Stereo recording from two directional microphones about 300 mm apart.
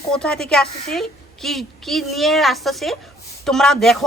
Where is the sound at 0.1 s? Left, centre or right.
Centre.